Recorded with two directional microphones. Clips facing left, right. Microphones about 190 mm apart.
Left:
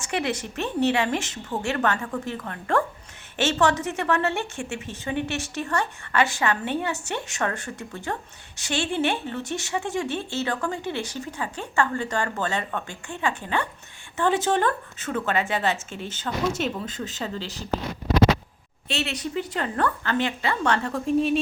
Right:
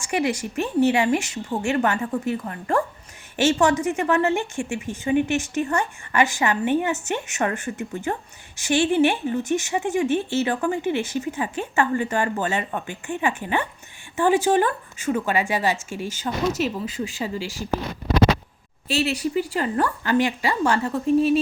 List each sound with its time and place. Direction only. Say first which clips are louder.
0.1 s speech: right 4 dB; 10° right (ahead or behind)
18.9 s speech: right 6 dB; 5° right (ahead or behind)